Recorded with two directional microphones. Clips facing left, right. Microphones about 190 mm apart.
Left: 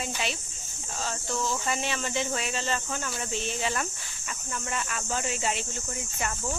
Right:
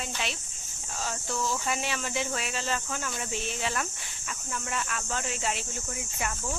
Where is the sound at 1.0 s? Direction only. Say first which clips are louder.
Left 1 dB; 10° right (ahead or behind).